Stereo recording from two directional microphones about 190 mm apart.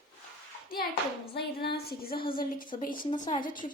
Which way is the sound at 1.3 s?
55° left (ahead or behind).